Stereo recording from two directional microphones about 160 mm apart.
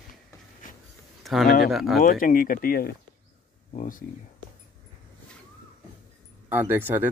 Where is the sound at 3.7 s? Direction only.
55° left (ahead or behind).